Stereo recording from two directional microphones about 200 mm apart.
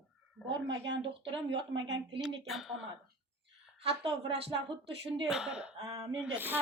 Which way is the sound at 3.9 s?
30° right (ahead or behind).